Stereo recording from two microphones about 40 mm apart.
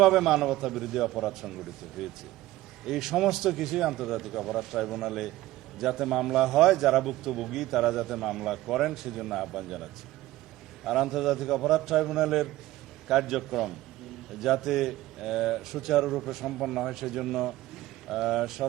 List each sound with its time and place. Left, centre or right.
0.0 s a man's voice: centre